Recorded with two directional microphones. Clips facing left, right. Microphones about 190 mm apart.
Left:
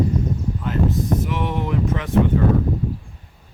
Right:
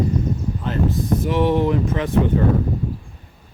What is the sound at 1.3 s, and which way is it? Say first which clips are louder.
Speech: right 6 dB; 30° right (ahead or behind).